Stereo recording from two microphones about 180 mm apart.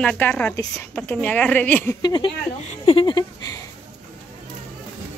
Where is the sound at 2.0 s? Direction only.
25° left (ahead or behind).